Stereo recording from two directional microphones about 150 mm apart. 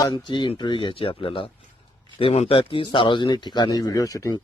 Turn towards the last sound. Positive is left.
turn(degrees=25)  # may be behind; listen again after turning